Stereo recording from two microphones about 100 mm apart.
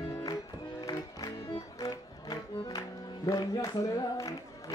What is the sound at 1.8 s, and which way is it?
Music, 40° left (ahead or behind).